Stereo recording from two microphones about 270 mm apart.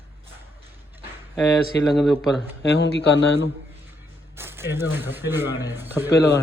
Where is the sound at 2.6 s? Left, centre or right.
Left.